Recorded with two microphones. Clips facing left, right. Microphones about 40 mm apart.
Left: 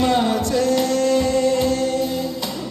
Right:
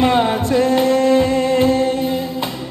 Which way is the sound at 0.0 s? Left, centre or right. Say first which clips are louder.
Right 3 dB; right.